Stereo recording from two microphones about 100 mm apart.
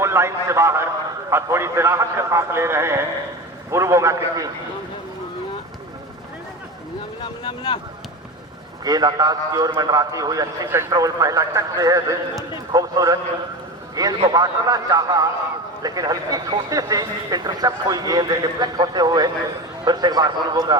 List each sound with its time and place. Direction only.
0.0 s a man's voice: 25° right (ahead or behind)
7.2 s speech: 55° left (ahead or behind)
8.8 s a man's voice: 40° right (ahead or behind)